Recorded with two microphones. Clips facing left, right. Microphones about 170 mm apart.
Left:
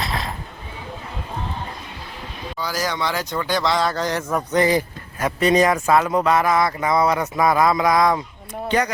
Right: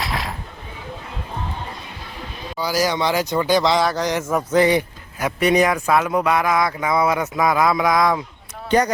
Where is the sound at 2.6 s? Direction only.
10° right (ahead or behind).